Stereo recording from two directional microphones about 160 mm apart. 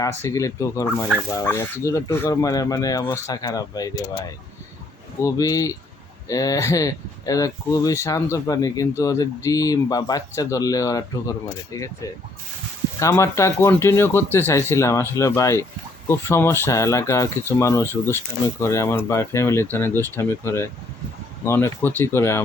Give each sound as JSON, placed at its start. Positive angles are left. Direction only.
{"t": 0.0, "sound": "speech", "side_deg": 15}
{"t": 13.0, "sound": "speech", "side_deg": 20}